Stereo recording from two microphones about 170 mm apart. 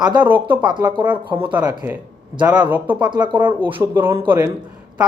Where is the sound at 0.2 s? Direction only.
10° right (ahead or behind).